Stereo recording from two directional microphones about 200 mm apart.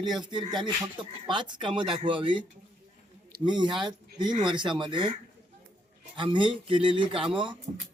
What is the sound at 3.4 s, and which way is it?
Speech, 20° right (ahead or behind).